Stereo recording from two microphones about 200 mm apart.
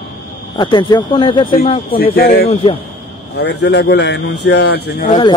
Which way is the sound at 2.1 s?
50° left (ahead or behind).